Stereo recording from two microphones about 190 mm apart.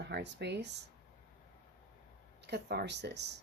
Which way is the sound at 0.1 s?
65° right (ahead or behind).